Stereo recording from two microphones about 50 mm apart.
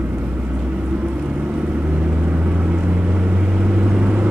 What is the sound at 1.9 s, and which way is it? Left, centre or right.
Vehicle, right.